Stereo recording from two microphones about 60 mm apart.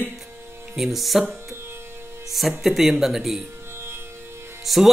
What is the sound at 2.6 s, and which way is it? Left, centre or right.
Speech, centre.